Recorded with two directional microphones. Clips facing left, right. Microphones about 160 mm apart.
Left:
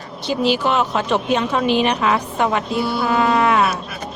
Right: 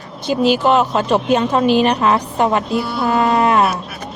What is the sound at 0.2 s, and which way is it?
Speech, 45° right (ahead or behind).